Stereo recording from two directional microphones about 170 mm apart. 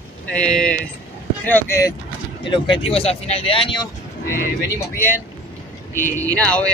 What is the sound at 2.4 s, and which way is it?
Speech, 30° left (ahead or behind).